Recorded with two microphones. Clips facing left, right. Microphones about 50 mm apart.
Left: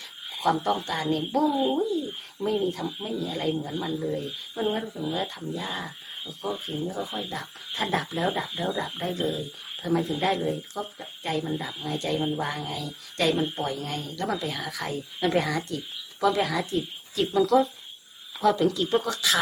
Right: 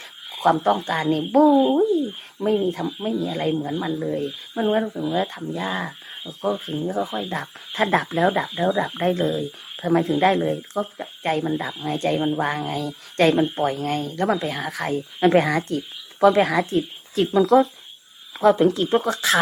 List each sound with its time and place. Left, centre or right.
0.3 s speech: right
1.5 s speech: right
1.9 s speech: right
6.7 s speech: right
12.2 s speech: right
12.5 s speech: right